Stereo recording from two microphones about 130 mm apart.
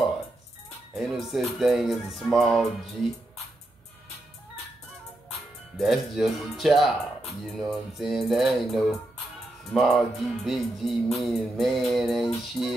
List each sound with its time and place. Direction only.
0.9 s music: centre (ahead or behind)
5.8 s music: centre (ahead or behind)